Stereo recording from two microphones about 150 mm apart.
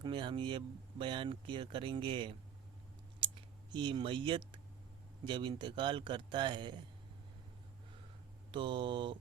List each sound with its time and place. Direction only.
0.0 s speech: 30° right (ahead or behind)
3.7 s speech: 30° right (ahead or behind)
8.5 s speech: 30° right (ahead or behind)